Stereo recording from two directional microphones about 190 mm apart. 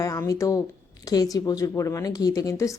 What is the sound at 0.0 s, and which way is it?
A woman's voice, 15° left (ahead or behind).